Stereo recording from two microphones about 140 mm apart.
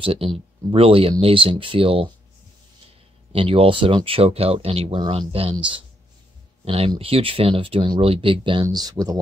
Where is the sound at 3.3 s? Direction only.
40° right (ahead or behind).